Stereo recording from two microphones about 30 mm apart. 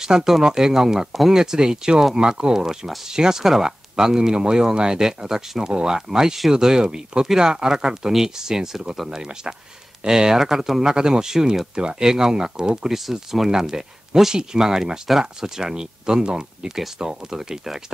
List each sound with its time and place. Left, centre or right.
0.0 s speech: centre
2.1 s speech: right
2.5 s speech: centre
3.4 s speech: centre
3.9 s speech: right
10.8 s speech: right
12.0 s speech: centre
13.1 s speech: centre
15.6 s speech: right
16.7 s speech: centre